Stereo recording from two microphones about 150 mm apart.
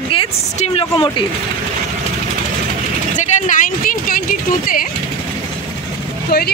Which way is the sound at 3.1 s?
55° left (ahead or behind).